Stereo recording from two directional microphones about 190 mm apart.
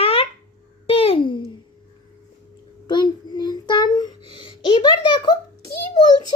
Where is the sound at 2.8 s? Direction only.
25° left (ahead or behind).